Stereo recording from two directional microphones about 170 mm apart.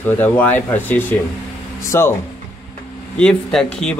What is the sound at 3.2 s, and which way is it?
Speech, 5° left (ahead or behind).